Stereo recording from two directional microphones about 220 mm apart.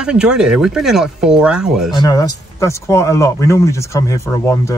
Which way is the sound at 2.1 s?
15° left (ahead or behind).